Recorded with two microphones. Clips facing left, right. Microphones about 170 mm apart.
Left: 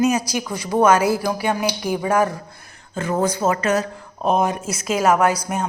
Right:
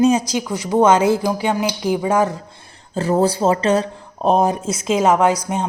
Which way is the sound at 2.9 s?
35° right (ahead or behind).